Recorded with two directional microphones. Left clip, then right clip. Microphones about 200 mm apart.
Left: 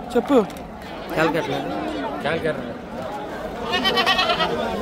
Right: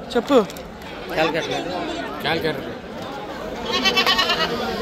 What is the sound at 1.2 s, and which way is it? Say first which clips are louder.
Speech: even; 55° left (ahead or behind).